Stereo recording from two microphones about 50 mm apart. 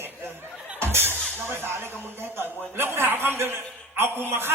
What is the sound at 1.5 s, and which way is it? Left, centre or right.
A man's voice, right.